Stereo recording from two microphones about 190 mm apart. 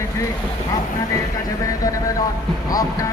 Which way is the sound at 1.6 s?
20° left (ahead or behind).